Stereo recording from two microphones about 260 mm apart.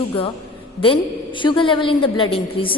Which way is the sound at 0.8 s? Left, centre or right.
Centre.